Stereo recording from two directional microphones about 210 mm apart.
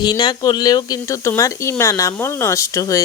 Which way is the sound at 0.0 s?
20° left (ahead or behind).